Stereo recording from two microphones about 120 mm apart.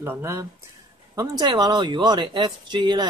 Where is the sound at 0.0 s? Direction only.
20° right (ahead or behind).